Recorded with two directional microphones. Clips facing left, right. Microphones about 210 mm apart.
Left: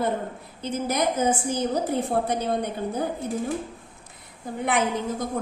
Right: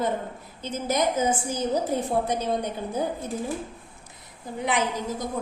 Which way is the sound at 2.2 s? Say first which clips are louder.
Left 1 dB; 55° left (ahead or behind).